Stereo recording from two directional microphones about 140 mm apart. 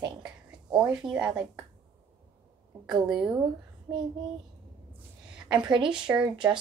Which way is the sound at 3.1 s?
5° right (ahead or behind).